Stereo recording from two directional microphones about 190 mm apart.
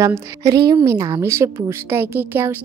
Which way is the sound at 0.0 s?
15° right (ahead or behind).